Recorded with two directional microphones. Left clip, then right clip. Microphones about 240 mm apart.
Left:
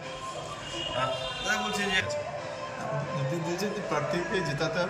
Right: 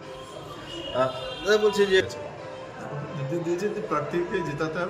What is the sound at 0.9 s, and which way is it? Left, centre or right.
A man's voice, right.